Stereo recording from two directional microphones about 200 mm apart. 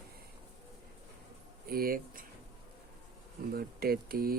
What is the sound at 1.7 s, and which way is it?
Speech, 45° right (ahead or behind).